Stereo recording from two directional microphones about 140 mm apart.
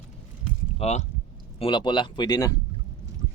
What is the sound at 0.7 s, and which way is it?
Speech, 50° left (ahead or behind).